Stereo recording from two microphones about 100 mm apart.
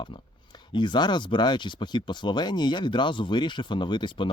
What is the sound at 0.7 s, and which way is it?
Speech, 50° left (ahead or behind).